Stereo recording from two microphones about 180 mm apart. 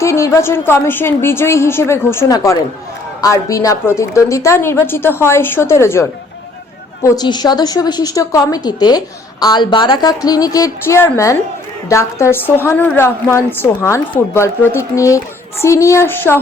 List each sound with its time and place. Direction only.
0.0 s a woman's voice: 15° left (ahead or behind)